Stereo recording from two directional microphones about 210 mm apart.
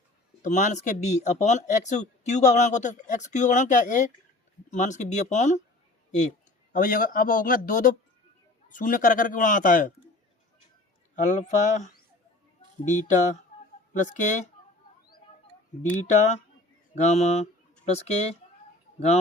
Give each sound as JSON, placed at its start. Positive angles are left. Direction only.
{"t": 0.4, "sound": "speech", "side_deg": 35}
{"t": 11.1, "sound": "speech", "side_deg": 35}
{"t": 17.0, "sound": "speech", "side_deg": 30}